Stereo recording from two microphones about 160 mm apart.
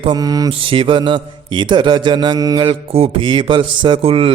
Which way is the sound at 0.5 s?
35° right (ahead or behind).